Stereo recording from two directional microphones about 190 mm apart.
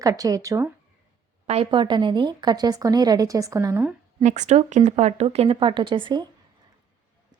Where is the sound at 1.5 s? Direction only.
30° right (ahead or behind).